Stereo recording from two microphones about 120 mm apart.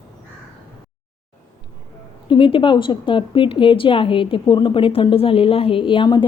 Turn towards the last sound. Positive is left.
turn(degrees=40)  # may be behind; listen again after turning